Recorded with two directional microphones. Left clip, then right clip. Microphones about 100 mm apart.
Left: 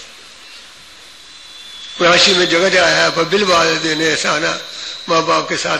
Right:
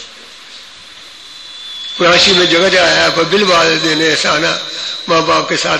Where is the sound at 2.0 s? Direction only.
30° left (ahead or behind).